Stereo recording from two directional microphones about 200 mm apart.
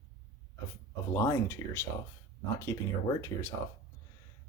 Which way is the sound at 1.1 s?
15° left (ahead or behind).